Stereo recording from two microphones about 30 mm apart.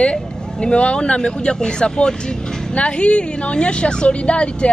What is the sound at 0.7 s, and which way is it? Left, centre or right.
A woman's voice, left.